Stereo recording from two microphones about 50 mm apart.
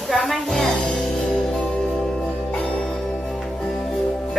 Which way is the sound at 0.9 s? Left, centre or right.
Centre.